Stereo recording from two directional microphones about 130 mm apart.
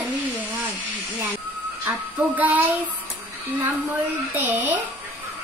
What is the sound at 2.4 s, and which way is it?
Speech, 10° right (ahead or behind).